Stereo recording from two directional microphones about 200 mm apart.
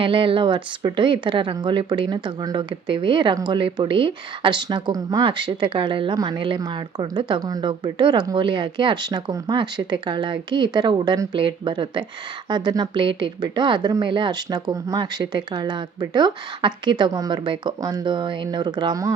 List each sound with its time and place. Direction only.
0.0 s speech: 25° right (ahead or behind)